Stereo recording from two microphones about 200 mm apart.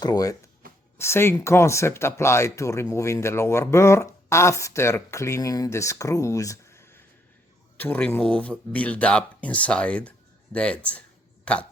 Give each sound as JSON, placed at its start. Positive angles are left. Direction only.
{"t": 0.0, "sound": "speech", "side_deg": 20}